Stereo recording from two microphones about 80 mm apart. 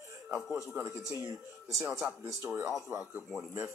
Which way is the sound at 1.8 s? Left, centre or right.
Centre.